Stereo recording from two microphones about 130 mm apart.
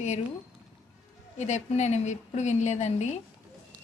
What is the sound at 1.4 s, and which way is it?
Speech, 65° left (ahead or behind).